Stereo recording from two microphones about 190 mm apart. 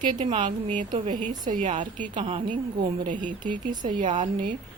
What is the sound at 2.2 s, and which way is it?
Speech, 30° right (ahead or behind).